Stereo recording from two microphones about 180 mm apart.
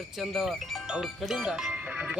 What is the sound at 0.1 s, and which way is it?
A man's voice, centre (ahead or behind).